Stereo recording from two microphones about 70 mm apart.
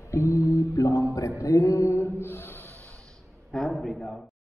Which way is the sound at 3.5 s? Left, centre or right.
Centre.